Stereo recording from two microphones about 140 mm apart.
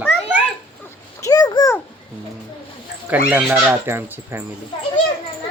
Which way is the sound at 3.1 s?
10° right (ahead or behind).